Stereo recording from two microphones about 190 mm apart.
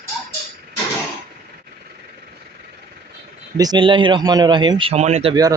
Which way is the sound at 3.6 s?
25° right (ahead or behind).